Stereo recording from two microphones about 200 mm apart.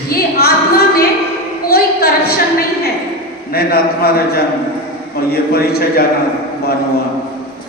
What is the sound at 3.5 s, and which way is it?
A man's voice, 50° left (ahead or behind).